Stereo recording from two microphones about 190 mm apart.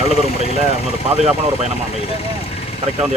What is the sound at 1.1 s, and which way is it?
Speech, 35° right (ahead or behind).